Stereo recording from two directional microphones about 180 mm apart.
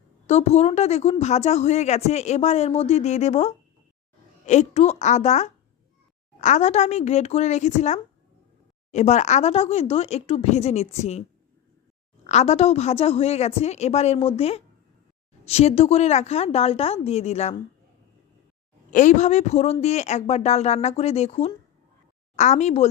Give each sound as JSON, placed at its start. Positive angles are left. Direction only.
{"t": 0.3, "sound": "a woman's voice", "side_deg": 40}
{"t": 12.2, "sound": "a woman's voice", "side_deg": 40}
{"t": 18.9, "sound": "a woman's voice", "side_deg": 45}